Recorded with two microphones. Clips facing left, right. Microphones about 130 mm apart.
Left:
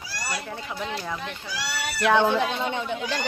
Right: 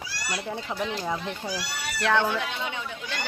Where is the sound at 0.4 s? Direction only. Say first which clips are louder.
Right 2 dB; 15° right (ahead or behind).